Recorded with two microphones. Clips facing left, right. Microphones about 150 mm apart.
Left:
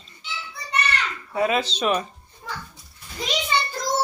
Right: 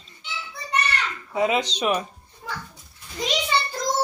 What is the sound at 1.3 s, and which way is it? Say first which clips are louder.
Speech: even; 15° right (ahead or behind).